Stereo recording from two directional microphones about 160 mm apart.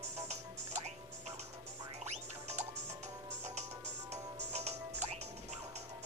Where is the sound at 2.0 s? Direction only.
45° right (ahead or behind).